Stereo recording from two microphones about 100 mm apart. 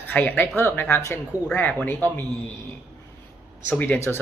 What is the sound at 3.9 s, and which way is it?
Speech, 25° left (ahead or behind).